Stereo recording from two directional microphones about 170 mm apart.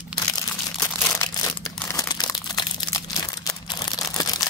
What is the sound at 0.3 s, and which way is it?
Crumpling, 25° left (ahead or behind).